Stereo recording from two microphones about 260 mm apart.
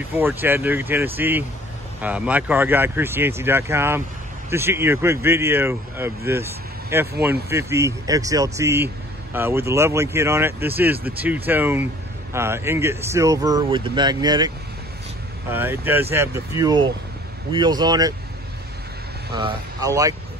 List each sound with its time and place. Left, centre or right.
0.1 s speech: centre
15.5 s speech: centre
19.3 s speech: centre